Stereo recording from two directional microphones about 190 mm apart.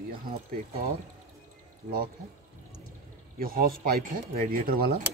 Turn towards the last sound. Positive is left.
turn(degrees=-50)  # may be behind; listen again after turning